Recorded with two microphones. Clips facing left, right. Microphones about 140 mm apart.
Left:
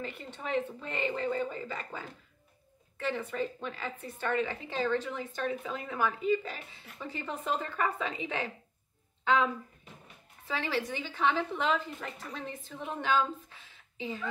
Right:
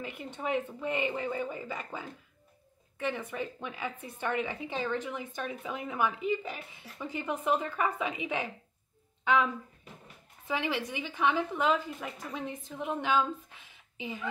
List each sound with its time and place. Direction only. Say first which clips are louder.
0.0 s a woman's voice: right 3 dB; 15° right (ahead or behind)
10.4 s a woman's voice: right 1 dB; 15° right (ahead or behind)